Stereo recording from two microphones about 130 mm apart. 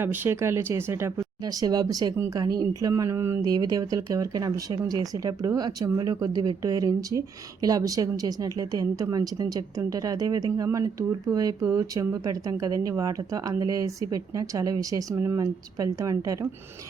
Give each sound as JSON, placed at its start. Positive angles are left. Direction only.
{"t": 0.0, "sound": "speech", "side_deg": -15}